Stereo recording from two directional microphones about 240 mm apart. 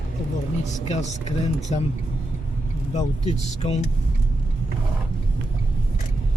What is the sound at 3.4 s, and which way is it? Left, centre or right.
Speech, left.